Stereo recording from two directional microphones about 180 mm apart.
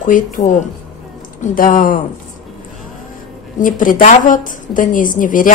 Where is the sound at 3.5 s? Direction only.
45° left (ahead or behind).